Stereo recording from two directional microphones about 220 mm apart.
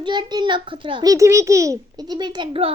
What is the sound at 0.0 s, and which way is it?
A child's voice, 20° right (ahead or behind).